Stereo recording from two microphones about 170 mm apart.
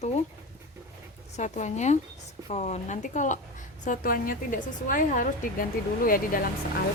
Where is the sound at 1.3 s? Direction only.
45° left (ahead or behind).